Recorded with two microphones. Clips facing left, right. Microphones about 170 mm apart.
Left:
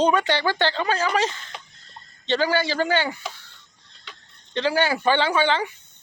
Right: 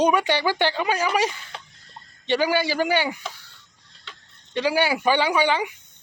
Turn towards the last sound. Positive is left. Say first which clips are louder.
# even
turn(degrees=-15)  # may be behind; listen again after turning